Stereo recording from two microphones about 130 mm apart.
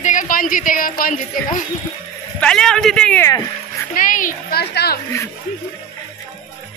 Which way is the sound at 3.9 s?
90° left.